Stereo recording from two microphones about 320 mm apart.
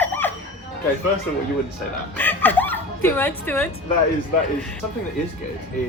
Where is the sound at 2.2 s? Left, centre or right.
Centre.